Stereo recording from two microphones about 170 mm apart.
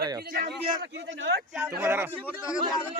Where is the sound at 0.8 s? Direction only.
90° right.